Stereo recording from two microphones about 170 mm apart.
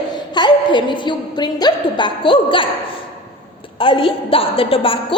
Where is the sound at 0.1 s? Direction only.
25° left (ahead or behind).